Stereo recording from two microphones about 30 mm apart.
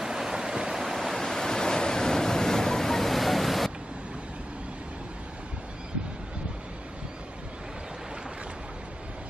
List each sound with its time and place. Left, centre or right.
0.0 s a sound: centre
0.7 s waves: centre
1.1 s waves: centre